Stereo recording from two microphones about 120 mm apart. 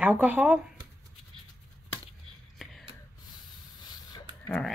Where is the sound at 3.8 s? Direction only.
35° left (ahead or behind).